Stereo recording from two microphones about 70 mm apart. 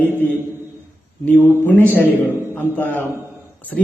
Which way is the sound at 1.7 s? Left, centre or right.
Left.